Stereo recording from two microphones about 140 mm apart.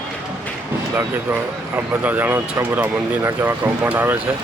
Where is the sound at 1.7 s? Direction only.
10° right (ahead or behind).